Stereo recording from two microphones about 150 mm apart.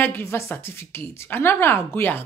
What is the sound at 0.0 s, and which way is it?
A woman's voice, 15° left (ahead or behind).